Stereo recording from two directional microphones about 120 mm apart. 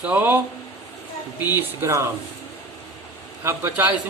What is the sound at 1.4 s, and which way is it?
Speech, 15° right (ahead or behind).